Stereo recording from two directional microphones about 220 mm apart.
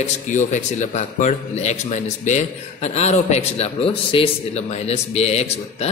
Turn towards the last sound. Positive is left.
turn(degrees=30)  # may be behind; listen again after turning